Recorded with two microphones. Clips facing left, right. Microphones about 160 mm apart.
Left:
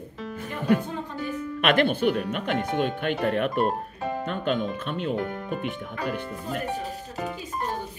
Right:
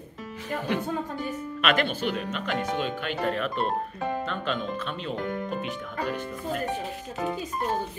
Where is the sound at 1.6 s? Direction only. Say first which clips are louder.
Left 4 dB; 50° left (ahead or behind).